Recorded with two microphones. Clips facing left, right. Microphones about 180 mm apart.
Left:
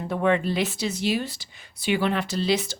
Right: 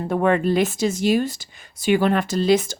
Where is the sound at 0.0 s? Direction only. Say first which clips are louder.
Right 4 dB; 50° right (ahead or behind).